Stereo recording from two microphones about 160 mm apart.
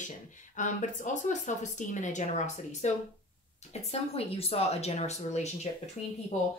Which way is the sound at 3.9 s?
40° left (ahead or behind).